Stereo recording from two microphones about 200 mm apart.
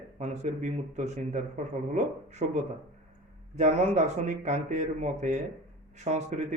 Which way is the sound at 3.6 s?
35° right (ahead or behind).